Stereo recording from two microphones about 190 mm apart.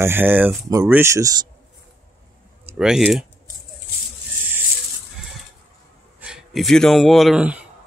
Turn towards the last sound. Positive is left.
turn(degrees=-5)  # may be behind; listen again after turning